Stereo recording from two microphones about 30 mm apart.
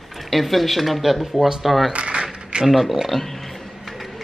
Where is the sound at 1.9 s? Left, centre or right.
Right.